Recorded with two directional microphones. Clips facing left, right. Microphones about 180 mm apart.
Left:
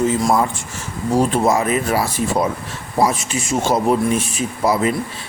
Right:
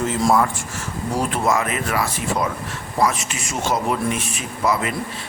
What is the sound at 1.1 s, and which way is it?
Speech, 30° left (ahead or behind).